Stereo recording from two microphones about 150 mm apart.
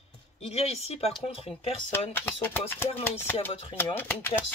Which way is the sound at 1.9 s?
15° left (ahead or behind).